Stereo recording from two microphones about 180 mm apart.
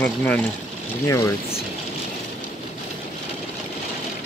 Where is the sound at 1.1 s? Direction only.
15° left (ahead or behind).